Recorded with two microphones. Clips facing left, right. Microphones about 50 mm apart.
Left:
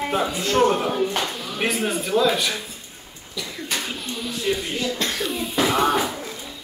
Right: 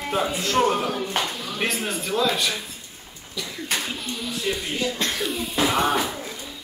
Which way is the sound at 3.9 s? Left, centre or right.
Centre.